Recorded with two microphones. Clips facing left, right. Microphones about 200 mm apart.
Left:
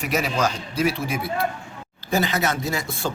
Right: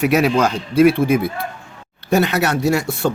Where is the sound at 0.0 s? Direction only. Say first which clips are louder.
Right 8 dB; 60° right (ahead or behind).